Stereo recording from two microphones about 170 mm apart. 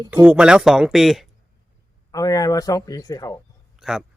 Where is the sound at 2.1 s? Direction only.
20° left (ahead or behind).